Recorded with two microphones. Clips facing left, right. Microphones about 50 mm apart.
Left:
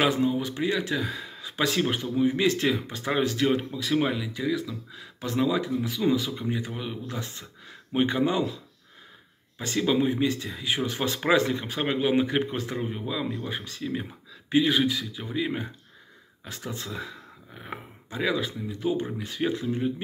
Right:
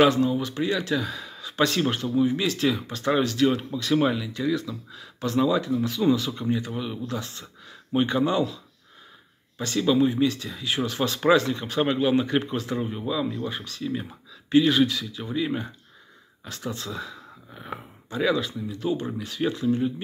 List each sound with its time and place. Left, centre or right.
0.0 s speech: centre
1.6 s speech: centre
2.1 s speech: left
2.7 s speech: centre
4.0 s speech: centre
4.9 s speech: left
7.1 s speech: left
9.6 s speech: left
17.6 s speech: centre